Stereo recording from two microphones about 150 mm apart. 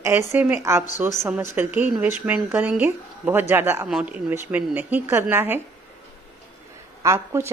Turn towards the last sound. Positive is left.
turn(degrees=-20)  # may be behind; listen again after turning